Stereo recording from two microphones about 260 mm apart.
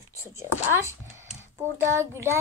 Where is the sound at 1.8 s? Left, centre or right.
Centre.